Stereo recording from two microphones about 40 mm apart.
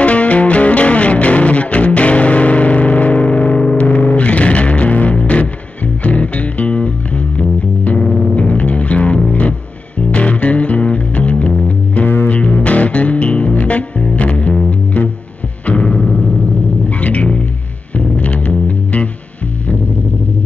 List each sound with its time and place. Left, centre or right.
0.0 s music: left
8.0 s music: left
8.5 s music: left
17.0 s music: left